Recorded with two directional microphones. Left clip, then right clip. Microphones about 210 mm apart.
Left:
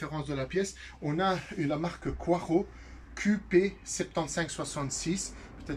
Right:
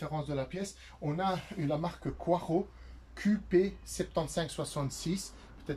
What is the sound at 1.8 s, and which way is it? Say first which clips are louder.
Speech: left 2 dB; 20° right (ahead or behind).